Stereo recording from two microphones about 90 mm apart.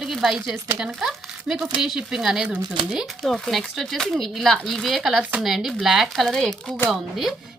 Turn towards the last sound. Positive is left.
turn(degrees=0)  # may be behind; listen again after turning